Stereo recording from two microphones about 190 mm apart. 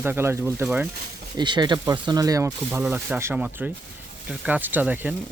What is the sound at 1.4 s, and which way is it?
Speech, 25° right (ahead or behind).